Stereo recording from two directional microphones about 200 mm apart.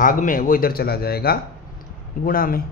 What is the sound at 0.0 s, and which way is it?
Speech, 40° left (ahead or behind).